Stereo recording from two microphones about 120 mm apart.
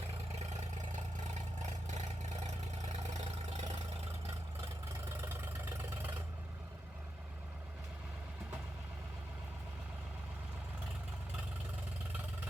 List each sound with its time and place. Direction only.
0.3 s vehicle: 80° right
2.5 s vehicle: 70° right (ahead or behind)
5.2 s engine: 20° right (ahead or behind)